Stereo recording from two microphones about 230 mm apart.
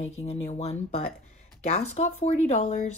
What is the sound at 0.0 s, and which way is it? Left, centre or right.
Speech, left.